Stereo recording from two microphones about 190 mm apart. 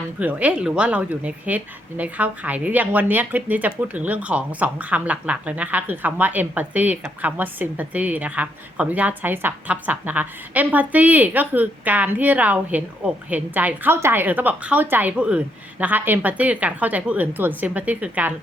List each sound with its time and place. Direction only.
0.2 s speech: 10° right (ahead or behind)